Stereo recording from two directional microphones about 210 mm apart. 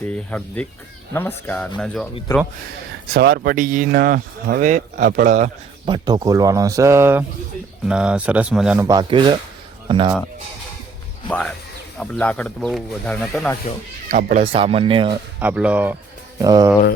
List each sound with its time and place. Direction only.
0.1 s speech: 5° left (ahead or behind)
3.1 s speech: 45° right (ahead or behind)
5.9 s speech: 20° right (ahead or behind)
8.9 s speech: 20° right (ahead or behind)
11.3 s speech: 5° left (ahead or behind)
14.1 s speech: 40° right (ahead or behind)
14.4 s speech: 25° right (ahead or behind)
15.4 s speech: 5° right (ahead or behind)